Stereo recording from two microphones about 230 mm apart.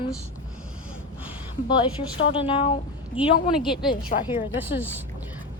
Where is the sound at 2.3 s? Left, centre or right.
Left.